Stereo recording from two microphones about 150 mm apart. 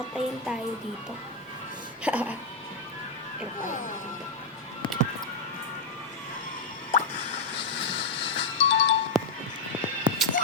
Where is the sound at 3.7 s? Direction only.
60° left (ahead or behind).